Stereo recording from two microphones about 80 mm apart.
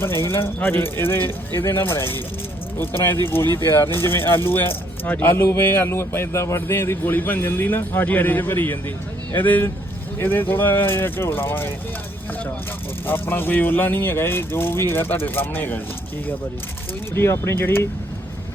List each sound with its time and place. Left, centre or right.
0.0 s a man's voice: left
13.1 s a man's voice: left
17.2 s a man's voice: left